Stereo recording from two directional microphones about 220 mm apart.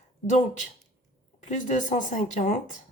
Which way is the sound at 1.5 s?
35° left (ahead or behind).